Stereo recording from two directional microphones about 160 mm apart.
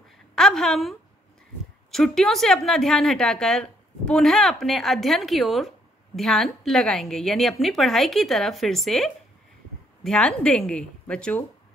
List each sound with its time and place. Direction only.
0.4 s a woman's voice: centre (ahead or behind)